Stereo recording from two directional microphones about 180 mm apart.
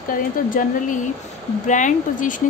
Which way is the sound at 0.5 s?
50° left (ahead or behind).